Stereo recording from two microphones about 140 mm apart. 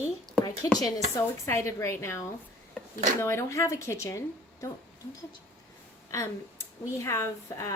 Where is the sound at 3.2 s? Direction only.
20° left (ahead or behind).